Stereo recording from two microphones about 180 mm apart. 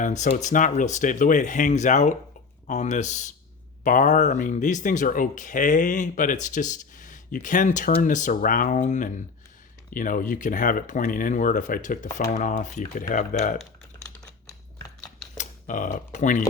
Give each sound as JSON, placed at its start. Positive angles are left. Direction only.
{"t": 0.0, "sound": "speech", "side_deg": 40}
{"t": 15.4, "sound": "speech", "side_deg": 45}